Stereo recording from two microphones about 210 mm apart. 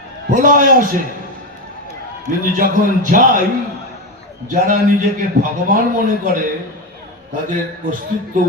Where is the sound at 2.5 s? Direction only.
40° right (ahead or behind).